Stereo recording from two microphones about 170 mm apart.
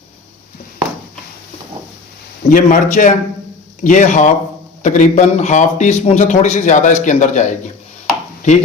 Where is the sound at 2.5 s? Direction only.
50° left (ahead or behind).